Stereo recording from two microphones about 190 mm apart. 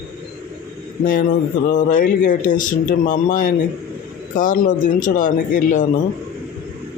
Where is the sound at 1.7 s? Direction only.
45° left (ahead or behind).